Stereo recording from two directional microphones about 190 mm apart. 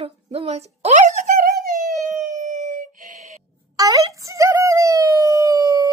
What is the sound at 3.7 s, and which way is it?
Wail, 20° right (ahead or behind).